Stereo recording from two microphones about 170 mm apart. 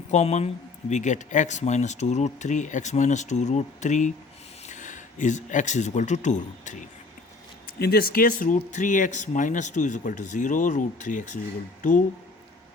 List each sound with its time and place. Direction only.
0.1 s speech: 40° left (ahead or behind)
7.8 s speech: 65° left (ahead or behind)